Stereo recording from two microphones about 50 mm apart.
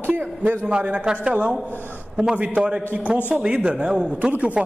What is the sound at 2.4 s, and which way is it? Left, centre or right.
Speech, right.